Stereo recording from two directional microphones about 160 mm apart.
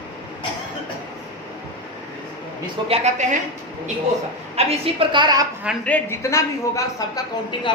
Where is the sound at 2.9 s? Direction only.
45° right (ahead or behind).